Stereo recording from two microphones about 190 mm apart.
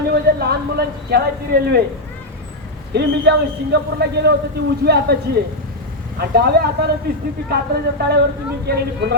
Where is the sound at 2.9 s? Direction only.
60° right (ahead or behind).